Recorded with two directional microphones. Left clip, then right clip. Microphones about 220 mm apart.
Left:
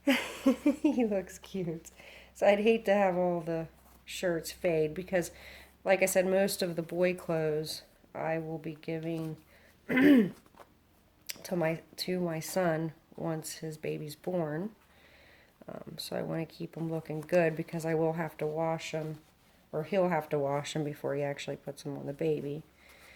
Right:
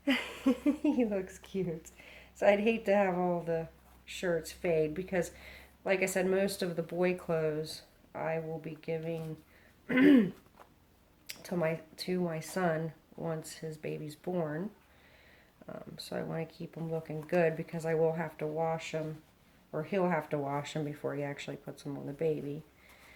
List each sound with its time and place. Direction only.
0.0 s speech: 45° left (ahead or behind)
11.3 s speech: 40° left (ahead or behind)
15.6 s speech: 40° left (ahead or behind)